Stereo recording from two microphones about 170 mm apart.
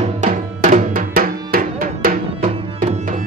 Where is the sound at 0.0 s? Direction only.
45° right (ahead or behind).